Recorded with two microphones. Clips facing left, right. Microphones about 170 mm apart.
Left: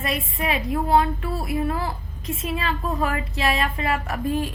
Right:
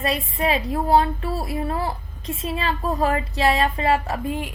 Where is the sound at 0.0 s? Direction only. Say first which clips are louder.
Right 3 dB; 30° right (ahead or behind).